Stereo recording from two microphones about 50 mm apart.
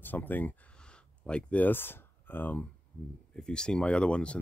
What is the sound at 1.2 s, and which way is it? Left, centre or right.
Speech, left.